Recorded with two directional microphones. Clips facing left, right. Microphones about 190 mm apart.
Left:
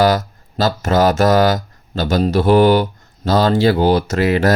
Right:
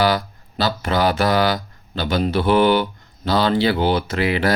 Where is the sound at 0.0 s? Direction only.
45° left (ahead or behind).